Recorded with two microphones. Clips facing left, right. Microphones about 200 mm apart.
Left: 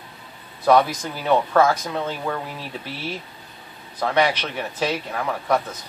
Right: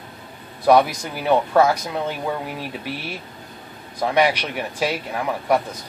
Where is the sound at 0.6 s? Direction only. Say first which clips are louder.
Right 2 dB; 10° right (ahead or behind).